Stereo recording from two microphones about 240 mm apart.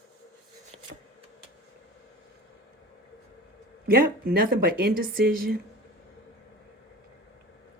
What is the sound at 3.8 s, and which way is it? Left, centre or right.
Speech, right.